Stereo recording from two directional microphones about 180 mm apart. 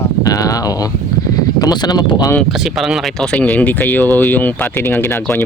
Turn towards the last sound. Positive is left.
turn(degrees=15)  # may be behind; listen again after turning